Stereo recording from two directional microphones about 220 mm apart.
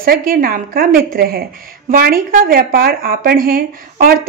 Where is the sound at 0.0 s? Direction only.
40° right (ahead or behind).